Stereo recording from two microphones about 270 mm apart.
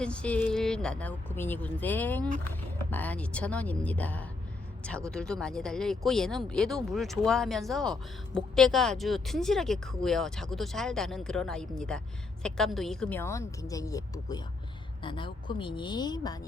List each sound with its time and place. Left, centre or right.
0.0 s a woman's voice: centre